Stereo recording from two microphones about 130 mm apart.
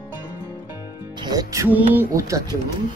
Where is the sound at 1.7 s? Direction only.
20° right (ahead or behind).